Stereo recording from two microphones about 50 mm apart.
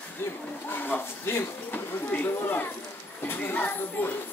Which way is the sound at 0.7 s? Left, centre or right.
Left.